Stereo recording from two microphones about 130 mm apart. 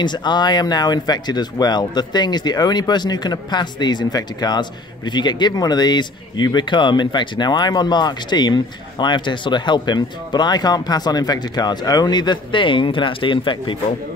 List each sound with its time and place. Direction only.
0.0 s speech: 35° left (ahead or behind)